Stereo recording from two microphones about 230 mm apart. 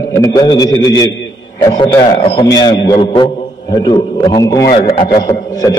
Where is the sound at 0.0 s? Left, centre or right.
Centre.